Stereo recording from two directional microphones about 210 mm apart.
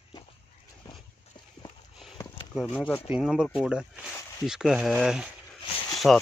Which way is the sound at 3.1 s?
5° right (ahead or behind).